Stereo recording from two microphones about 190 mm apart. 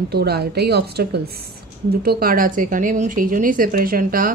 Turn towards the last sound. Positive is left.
turn(degrees=-50)  # may be behind; listen again after turning